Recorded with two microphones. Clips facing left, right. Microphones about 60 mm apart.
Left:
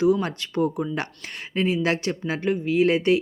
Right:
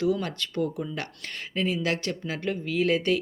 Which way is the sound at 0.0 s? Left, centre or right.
Left.